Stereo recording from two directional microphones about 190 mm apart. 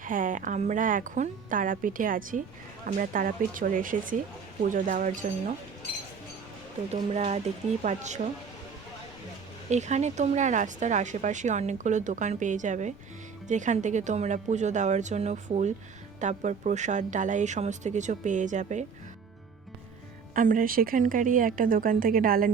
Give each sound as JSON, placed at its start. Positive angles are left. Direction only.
{"t": 0.0, "sound": "speech", "side_deg": -45}
{"t": 6.9, "sound": "speech", "side_deg": -35}
{"t": 9.6, "sound": "speech", "side_deg": -35}
{"t": 20.3, "sound": "speech", "side_deg": -45}